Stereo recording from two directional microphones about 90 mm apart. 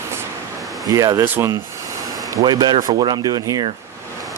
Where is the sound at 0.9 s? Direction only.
40° right (ahead or behind).